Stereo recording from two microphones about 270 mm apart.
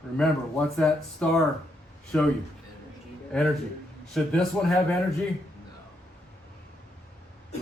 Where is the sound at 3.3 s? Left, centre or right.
Centre.